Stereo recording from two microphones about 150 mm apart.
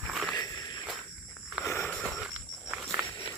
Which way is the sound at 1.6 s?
15° left (ahead or behind).